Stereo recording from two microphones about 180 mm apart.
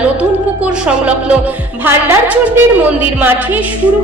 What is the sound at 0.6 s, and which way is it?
A woman's voice, 5° right (ahead or behind).